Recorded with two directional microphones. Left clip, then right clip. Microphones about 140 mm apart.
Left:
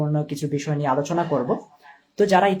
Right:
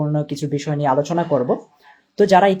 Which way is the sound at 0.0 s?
30° right (ahead or behind).